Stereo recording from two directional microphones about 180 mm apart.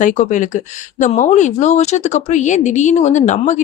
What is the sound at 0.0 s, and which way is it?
Speech, 45° left (ahead or behind).